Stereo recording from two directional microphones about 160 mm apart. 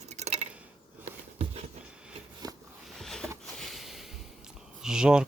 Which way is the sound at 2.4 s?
25° right (ahead or behind).